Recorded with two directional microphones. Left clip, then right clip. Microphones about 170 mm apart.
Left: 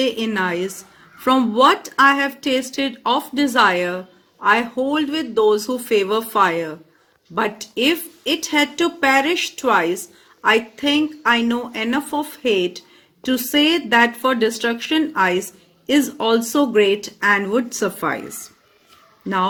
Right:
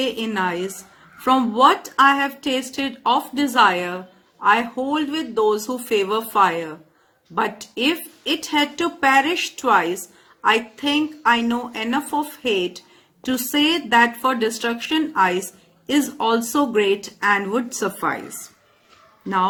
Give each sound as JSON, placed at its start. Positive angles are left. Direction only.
{"t": 0.0, "sound": "a woman's voice", "side_deg": 25}